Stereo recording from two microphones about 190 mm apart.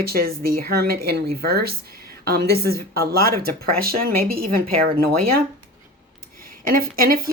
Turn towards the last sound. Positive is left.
turn(degrees=-50)  # may be behind; listen again after turning